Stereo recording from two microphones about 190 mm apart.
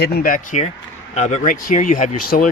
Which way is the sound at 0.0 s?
50° left (ahead or behind).